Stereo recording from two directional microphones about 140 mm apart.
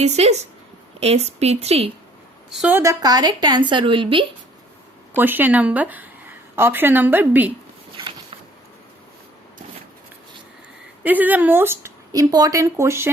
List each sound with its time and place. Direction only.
0.0 s a woman's voice: 50° right (ahead or behind)
2.5 s a woman's voice: 5° right (ahead or behind)
2.7 s a woman's voice: 25° right (ahead or behind)
5.1 s a woman's voice: 15° right (ahead or behind)
7.9 s a sound: 35° right (ahead or behind)
11.0 s speech: 10° right (ahead or behind)